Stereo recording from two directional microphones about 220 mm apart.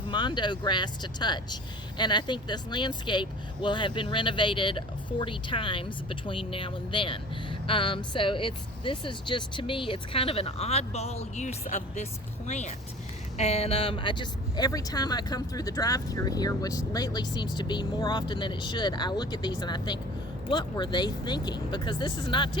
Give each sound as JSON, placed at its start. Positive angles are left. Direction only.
{"t": 0.1, "sound": "speech", "side_deg": 20}